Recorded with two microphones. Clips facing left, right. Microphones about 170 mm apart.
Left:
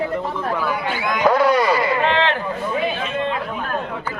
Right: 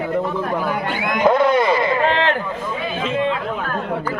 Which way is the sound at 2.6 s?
90° right.